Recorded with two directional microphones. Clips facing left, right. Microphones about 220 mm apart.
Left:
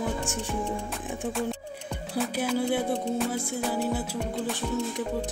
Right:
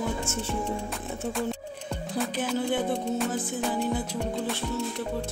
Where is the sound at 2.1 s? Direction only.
5° left (ahead or behind).